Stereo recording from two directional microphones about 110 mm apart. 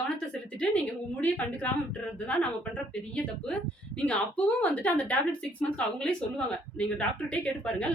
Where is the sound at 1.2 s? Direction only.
15° left (ahead or behind).